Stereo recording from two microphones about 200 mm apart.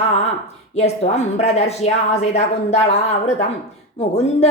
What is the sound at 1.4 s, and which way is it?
Speech, 35° left (ahead or behind).